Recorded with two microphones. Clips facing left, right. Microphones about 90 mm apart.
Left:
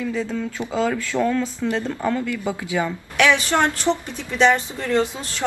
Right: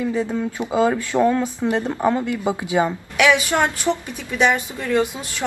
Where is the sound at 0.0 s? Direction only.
20° right (ahead or behind).